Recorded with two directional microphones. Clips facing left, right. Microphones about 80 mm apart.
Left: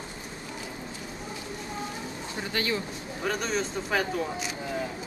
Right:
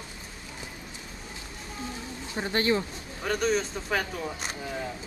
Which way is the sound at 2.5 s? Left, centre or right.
Right.